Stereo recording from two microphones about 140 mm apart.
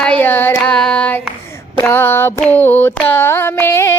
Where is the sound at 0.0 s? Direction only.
10° left (ahead or behind).